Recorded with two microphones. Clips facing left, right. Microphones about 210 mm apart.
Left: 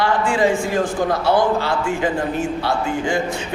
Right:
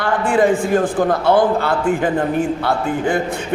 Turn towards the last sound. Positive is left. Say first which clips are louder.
# right 2 dB
turn(degrees=-55)  # may be behind; listen again after turning